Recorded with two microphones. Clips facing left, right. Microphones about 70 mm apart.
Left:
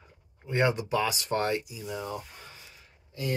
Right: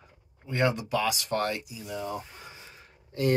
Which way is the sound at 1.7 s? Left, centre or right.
Centre.